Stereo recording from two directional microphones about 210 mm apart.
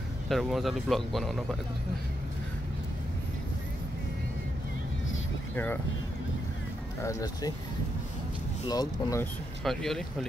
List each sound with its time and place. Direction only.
0.3 s speech: centre (ahead or behind)
5.5 s speech: 10° left (ahead or behind)
7.0 s speech: 15° left (ahead or behind)
8.6 s speech: 20° left (ahead or behind)
9.6 s speech: centre (ahead or behind)